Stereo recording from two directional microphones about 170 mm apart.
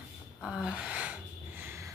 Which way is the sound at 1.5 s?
15° right (ahead or behind).